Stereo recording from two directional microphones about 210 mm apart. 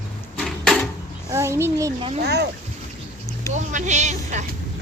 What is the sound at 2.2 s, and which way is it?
Speech, 50° right (ahead or behind).